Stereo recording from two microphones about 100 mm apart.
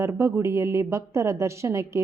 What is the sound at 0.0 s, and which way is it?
A woman's voice, 30° right (ahead or behind).